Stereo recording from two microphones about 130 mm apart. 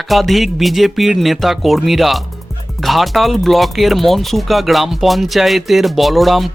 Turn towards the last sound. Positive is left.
turn(degrees=0)  # may be behind; listen again after turning